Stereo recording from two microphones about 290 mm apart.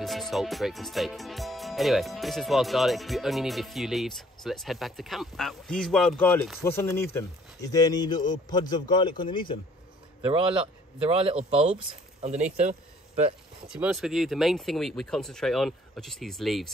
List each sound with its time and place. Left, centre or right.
0.0 s a man's voice: centre
10.2 s speech: centre
12.5 s a sound: right
13.7 s speech: centre